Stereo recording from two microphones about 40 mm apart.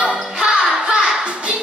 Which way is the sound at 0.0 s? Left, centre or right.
Right.